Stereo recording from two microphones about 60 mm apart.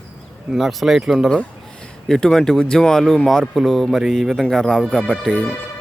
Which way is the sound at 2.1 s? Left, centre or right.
Centre.